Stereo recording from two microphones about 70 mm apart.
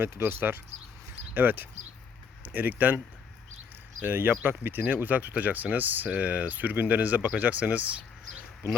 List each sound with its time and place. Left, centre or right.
0.0 s speech: right
4.0 s speech: right